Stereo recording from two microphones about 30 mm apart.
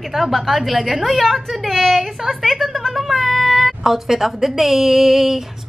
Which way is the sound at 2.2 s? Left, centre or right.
Centre.